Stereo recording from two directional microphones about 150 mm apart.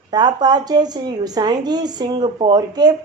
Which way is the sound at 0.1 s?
30° right (ahead or behind).